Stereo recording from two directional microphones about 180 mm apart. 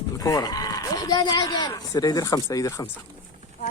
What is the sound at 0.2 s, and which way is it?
Speech, 20° left (ahead or behind).